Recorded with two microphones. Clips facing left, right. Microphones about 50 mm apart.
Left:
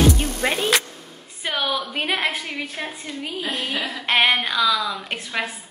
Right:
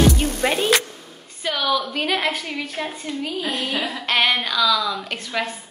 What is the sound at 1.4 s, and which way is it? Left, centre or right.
A woman's voice, left.